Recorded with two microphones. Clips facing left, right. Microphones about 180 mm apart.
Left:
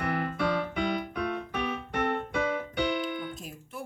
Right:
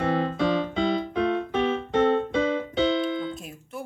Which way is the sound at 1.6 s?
90° right.